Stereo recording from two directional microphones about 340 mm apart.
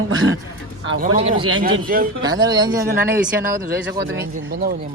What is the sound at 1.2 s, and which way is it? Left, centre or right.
Speech, centre.